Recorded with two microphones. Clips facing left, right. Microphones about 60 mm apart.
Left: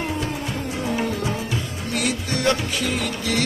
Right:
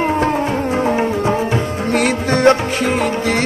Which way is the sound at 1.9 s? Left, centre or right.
Right.